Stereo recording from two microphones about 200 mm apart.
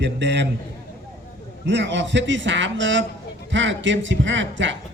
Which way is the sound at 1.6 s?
65° right (ahead or behind).